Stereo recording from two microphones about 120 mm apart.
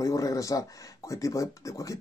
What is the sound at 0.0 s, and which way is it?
Speech, 30° left (ahead or behind).